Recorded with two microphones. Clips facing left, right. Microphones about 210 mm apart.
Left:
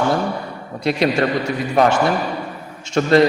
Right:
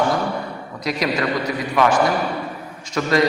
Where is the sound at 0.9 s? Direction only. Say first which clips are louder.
Left 4 dB; 30° left (ahead or behind).